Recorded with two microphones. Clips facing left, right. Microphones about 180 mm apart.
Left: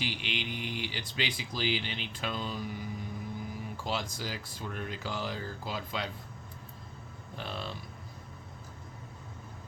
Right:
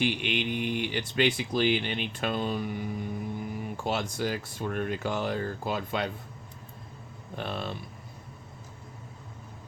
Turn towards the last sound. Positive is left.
turn(degrees=-60)  # may be behind; listen again after turning